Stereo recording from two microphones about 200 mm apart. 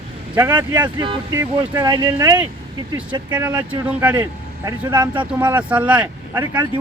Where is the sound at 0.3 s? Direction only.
10° right (ahead or behind).